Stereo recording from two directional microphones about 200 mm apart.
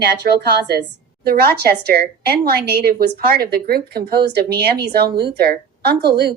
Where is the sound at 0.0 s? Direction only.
55° right (ahead or behind).